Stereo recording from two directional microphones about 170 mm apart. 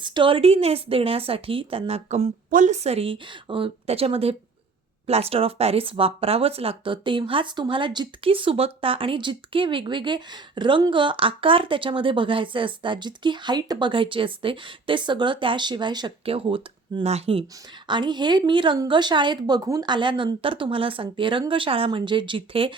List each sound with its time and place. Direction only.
0.0 s a woman's voice: 30° right (ahead or behind)